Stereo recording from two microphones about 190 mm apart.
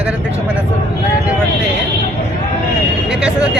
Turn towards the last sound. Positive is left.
turn(degrees=-5)  # may be behind; listen again after turning